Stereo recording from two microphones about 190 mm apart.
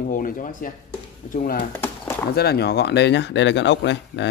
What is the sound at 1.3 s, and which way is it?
Speech, 50° left (ahead or behind).